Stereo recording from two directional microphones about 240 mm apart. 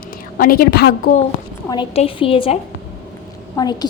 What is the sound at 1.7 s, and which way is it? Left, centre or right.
Speech, left.